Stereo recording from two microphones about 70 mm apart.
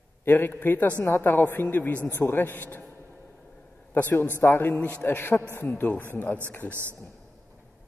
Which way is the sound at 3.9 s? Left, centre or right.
Left.